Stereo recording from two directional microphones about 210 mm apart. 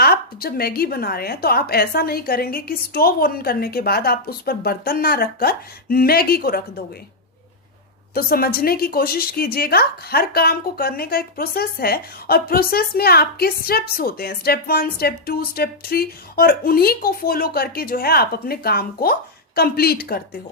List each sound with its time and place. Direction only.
0.0 s a woman's voice: 45° left (ahead or behind)
8.1 s a woman's voice: 45° left (ahead or behind)